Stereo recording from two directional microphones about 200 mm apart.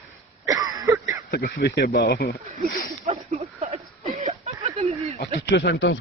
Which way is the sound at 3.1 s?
30° right (ahead or behind).